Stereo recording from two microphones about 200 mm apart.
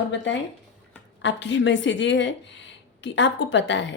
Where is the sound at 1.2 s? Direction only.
65° left (ahead or behind).